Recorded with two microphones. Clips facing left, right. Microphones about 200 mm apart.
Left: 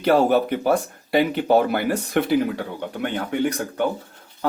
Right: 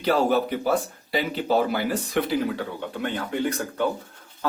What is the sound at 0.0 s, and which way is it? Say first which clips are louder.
Speech: left 4 dB; 55° left (ahead or behind).